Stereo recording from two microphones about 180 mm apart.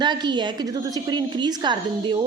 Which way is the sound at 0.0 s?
25° right (ahead or behind).